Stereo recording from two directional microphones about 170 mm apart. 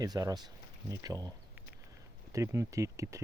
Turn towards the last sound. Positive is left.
turn(degrees=-20)  # may be behind; listen again after turning